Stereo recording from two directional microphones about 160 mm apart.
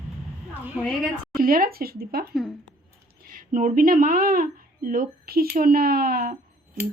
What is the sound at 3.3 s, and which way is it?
A woman's voice, 60° right (ahead or behind).